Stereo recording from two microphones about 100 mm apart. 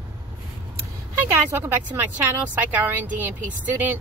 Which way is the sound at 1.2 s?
20° right (ahead or behind).